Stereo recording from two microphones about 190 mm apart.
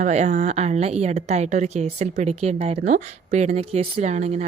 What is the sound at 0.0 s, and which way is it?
A woman's voice, 40° right (ahead or behind).